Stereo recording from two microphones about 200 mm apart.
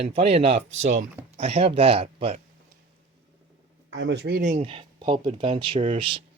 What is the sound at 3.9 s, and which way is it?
Speech, 65° right (ahead or behind).